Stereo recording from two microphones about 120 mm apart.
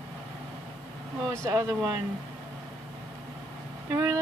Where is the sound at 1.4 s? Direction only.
25° right (ahead or behind).